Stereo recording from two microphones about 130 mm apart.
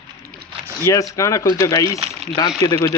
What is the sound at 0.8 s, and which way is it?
Speech, 25° left (ahead or behind).